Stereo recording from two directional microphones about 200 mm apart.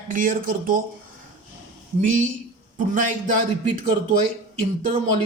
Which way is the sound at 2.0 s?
40° right (ahead or behind).